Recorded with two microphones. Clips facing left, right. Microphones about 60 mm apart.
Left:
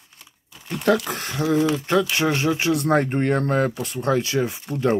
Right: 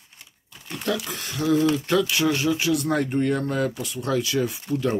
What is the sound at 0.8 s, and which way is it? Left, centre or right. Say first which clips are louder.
Speech: left 7 dB; left.